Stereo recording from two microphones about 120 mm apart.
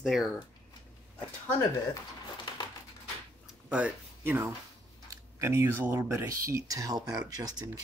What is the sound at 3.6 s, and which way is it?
Speech, 10° right (ahead or behind).